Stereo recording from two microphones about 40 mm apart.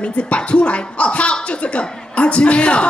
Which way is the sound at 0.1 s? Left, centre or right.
Left.